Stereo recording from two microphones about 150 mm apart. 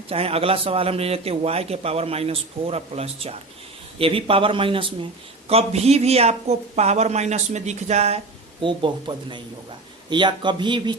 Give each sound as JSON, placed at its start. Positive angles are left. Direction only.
{"t": 0.1, "sound": "a man's voice", "side_deg": -40}
{"t": 8.6, "sound": "a man's voice", "side_deg": -35}